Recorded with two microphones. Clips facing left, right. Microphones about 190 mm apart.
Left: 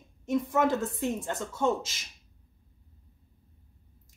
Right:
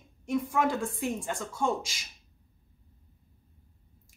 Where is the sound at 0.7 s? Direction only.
10° right (ahead or behind).